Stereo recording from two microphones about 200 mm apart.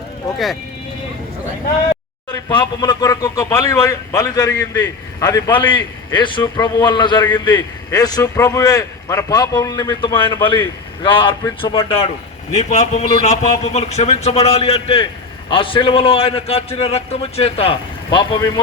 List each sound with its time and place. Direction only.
2.3 s speech: 20° left (ahead or behind)